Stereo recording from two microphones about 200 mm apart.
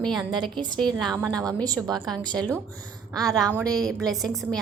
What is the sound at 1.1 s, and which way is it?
Speech, 15° right (ahead or behind).